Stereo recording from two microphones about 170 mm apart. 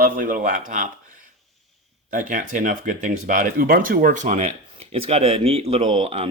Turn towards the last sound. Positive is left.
turn(degrees=-35)  # may be behind; listen again after turning